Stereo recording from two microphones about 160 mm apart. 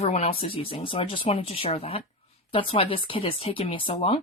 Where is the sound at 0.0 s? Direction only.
40° left (ahead or behind).